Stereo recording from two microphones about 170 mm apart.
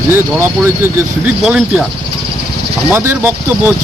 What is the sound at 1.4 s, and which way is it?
Speech, 5° right (ahead or behind).